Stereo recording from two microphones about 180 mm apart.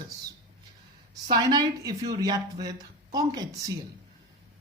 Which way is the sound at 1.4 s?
20° right (ahead or behind).